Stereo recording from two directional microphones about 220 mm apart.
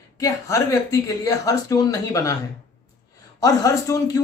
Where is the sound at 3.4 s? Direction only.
15° left (ahead or behind).